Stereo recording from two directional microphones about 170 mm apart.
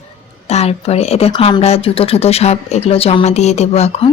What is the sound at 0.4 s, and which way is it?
Speech, 35° left (ahead or behind).